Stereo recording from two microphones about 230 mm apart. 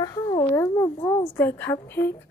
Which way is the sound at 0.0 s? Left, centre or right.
Centre.